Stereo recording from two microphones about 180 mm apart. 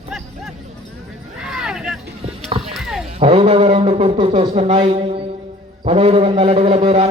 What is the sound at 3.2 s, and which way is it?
A man's voice, 35° right (ahead or behind).